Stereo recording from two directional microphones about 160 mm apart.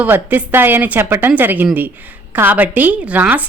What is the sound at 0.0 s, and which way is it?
A woman's voice, 10° right (ahead or behind).